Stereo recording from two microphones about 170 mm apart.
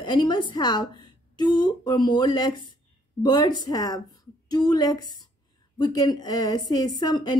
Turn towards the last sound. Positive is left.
turn(degrees=25)  # may be behind; listen again after turning